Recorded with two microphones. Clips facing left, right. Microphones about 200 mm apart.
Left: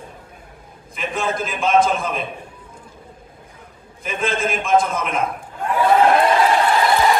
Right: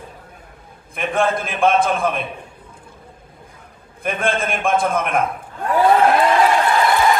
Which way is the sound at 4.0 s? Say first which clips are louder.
Right 2 dB; 55° right (ahead or behind).